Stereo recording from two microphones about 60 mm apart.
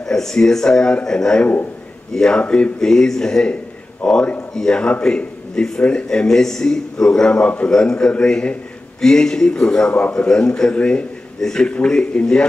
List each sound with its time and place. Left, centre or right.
0.0 s a man's voice: centre